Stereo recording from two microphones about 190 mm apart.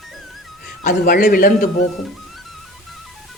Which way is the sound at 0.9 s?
50° left (ahead or behind).